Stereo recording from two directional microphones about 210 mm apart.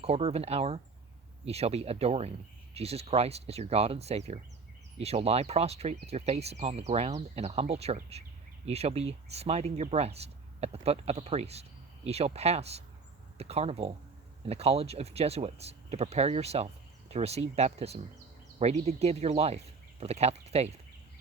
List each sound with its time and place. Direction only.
0.0 s speech: 30° right (ahead or behind)